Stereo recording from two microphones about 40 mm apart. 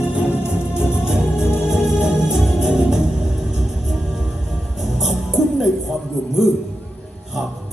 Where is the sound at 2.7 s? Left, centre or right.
Right.